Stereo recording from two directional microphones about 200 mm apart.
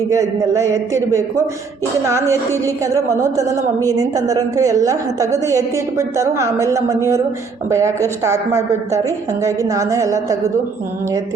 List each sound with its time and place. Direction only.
0.1 s a woman's voice: 15° right (ahead or behind)